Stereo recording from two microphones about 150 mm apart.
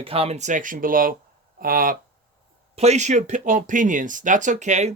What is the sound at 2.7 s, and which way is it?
Speech, 45° right (ahead or behind).